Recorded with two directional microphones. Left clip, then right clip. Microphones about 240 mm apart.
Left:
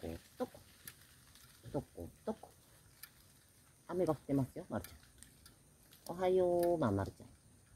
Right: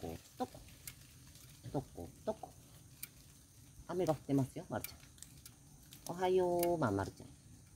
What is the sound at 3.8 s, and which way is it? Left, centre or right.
Speech, centre.